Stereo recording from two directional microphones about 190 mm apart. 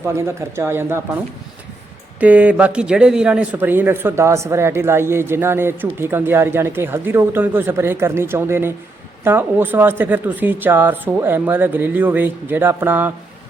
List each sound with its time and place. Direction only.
0.0 s a man's voice: 15° right (ahead or behind)
2.1 s a man's voice: 10° right (ahead or behind)